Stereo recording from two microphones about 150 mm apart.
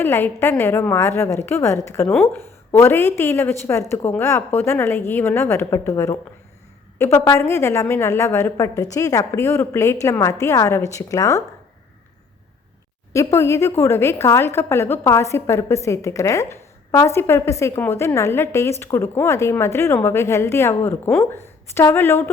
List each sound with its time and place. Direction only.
0.0 s a woman's voice: 15° left (ahead or behind)
13.1 s a woman's voice: 20° left (ahead or behind)